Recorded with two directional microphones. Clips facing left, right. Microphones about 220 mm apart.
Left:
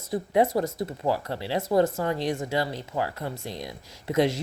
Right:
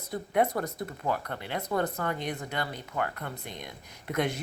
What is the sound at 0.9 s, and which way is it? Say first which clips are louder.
Speech: left 5 dB; 30° left (ahead or behind).